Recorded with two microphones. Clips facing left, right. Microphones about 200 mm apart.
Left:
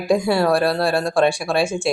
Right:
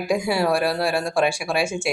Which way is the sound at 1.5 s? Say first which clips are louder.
Left 3 dB; 35° left (ahead or behind).